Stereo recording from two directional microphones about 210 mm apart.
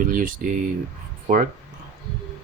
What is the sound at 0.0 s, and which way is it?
Speech, 40° right (ahead or behind).